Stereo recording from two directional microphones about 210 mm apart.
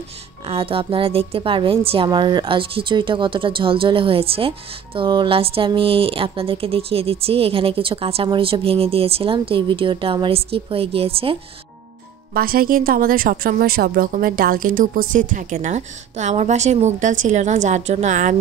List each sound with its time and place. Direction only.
0.5 s a woman's voice: 25° right (ahead or behind)
12.4 s a woman's voice: 45° right (ahead or behind)